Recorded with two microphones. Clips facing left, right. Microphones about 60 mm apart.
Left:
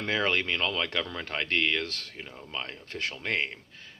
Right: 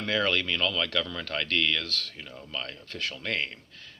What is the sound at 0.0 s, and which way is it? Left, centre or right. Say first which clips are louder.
Speech: even; left.